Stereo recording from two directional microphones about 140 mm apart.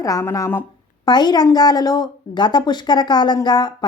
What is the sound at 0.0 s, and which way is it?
Speech, 25° left (ahead or behind).